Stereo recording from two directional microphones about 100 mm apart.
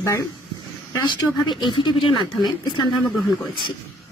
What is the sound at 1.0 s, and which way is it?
Speech, 50° left (ahead or behind).